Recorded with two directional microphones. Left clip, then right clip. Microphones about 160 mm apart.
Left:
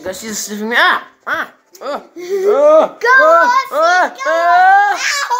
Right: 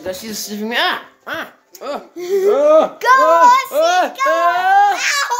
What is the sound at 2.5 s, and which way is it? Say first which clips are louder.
Speech: left 3 dB; 5° right (ahead or behind).